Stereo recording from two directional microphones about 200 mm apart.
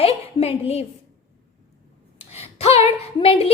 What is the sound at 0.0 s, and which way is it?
Speech, 30° left (ahead or behind).